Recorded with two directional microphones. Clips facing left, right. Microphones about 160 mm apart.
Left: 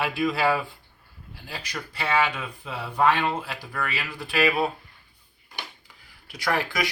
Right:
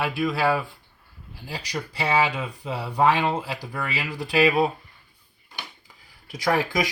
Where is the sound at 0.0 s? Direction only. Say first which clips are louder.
Even; centre (ahead or behind).